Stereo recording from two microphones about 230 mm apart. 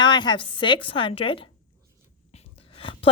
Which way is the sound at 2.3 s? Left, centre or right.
Left.